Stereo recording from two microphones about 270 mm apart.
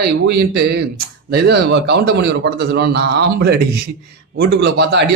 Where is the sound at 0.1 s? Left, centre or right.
Right.